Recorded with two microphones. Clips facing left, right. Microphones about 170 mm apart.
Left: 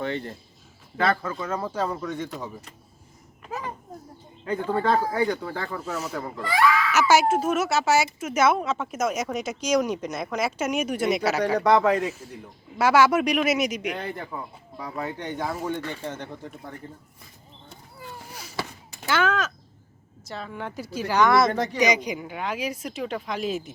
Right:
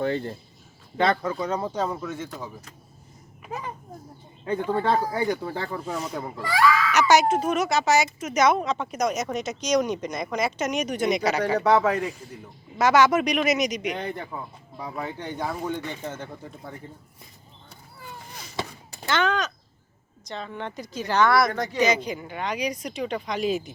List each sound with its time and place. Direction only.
0.0 s speech: 35° right (ahead or behind)
0.9 s a child's voice: 25° right (ahead or behind)
5.9 s speech: 5° left (ahead or behind)
6.1 s speech: 10° right (ahead or behind)
6.5 s speech: 5° left (ahead or behind)
11.5 s speech: 5° right (ahead or behind)
12.8 s speech: 10° left (ahead or behind); by 16.3 s 10° right (ahead or behind)
18.2 s a sound: 10° left (ahead or behind)
19.0 s speech: 5° left (ahead or behind); by 21.6 s 25° left (ahead or behind)
21.6 s speech: 15° left (ahead or behind)